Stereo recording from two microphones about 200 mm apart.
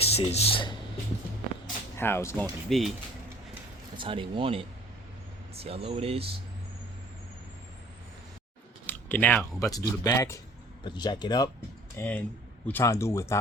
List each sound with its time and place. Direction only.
0.0 s speech: 30° left (ahead or behind)
2.0 s speech: 10° left (ahead or behind)
2.6 s speech: centre (ahead or behind)
3.9 s speech: 25° right (ahead or behind)
8.9 s speech: 10° left (ahead or behind)
11.9 s speech: 5° left (ahead or behind)